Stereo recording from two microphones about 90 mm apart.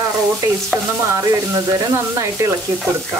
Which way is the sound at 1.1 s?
35° right (ahead or behind).